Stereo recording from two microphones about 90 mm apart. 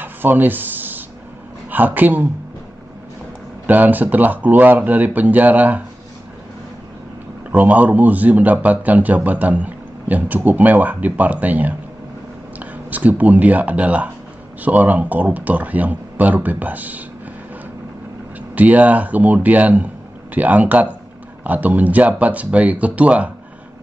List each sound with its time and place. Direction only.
0.0 s a sound: 20° right (ahead or behind)
1.7 s speech: 20° right (ahead or behind)
3.6 s speech: 20° right (ahead or behind)
7.5 s a man's voice: 20° right (ahead or behind)
18.5 s a man's voice: 15° right (ahead or behind)